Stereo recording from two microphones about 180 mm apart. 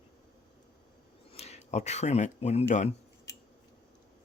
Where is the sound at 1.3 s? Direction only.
35° left (ahead or behind).